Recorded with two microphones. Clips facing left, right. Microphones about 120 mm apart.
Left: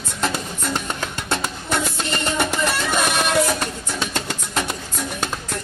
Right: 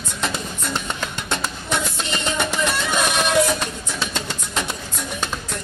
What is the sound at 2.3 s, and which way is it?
Music, 5° left (ahead or behind).